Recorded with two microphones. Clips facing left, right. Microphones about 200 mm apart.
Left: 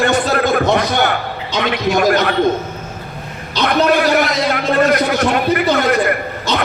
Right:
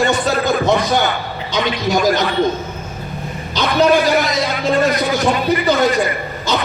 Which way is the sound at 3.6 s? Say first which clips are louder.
Even; 65° left (ahead or behind).